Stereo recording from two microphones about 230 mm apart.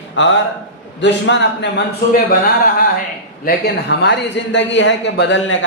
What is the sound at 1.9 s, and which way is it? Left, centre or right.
Speech, left.